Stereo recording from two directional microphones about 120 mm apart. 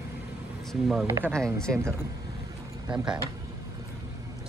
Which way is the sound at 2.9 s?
5° right (ahead or behind).